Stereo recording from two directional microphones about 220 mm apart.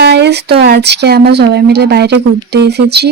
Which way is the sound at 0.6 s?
50° right (ahead or behind).